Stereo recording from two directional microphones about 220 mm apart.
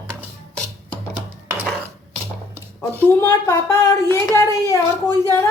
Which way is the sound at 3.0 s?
10° left (ahead or behind).